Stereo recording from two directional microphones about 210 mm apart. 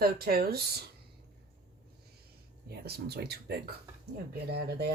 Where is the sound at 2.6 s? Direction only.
50° right (ahead or behind).